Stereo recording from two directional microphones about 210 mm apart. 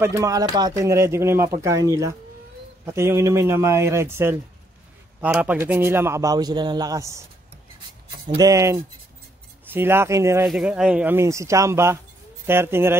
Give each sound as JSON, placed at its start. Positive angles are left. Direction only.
{"t": 0.0, "sound": "a man's voice", "side_deg": -15}
{"t": 8.3, "sound": "a man's voice", "side_deg": -15}